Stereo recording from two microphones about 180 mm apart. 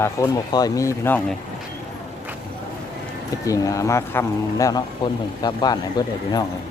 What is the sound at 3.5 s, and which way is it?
Speech, 20° left (ahead or behind).